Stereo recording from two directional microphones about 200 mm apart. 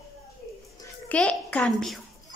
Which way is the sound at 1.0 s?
5° left (ahead or behind).